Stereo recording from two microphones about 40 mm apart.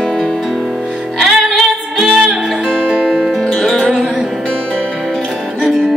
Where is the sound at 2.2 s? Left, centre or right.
Centre.